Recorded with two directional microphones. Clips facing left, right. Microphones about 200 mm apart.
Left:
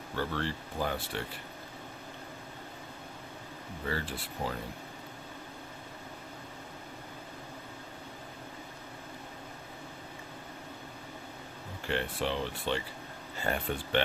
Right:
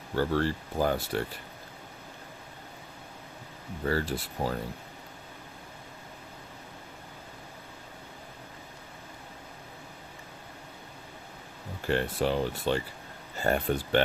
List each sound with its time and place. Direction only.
0.2 s speech: 40° right (ahead or behind)
3.8 s speech: 40° right (ahead or behind)
11.9 s speech: 45° right (ahead or behind)